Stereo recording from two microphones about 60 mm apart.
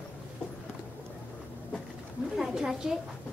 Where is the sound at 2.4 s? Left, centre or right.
Centre.